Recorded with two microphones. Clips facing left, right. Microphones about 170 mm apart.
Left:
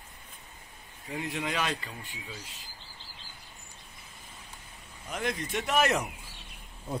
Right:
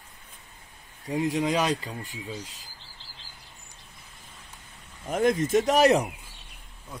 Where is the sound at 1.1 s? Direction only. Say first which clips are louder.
Right 8 dB; 40° right (ahead or behind).